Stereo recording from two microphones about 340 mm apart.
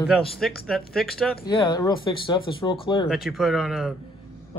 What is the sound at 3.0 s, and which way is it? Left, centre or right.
Speech, centre.